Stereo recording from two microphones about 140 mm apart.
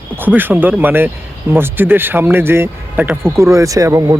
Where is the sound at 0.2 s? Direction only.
15° right (ahead or behind).